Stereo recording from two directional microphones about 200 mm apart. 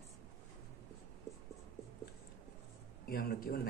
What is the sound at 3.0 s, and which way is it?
Speech, 50° left (ahead or behind).